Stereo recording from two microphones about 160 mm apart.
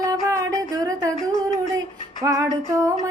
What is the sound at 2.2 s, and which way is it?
Child singing, 20° right (ahead or behind).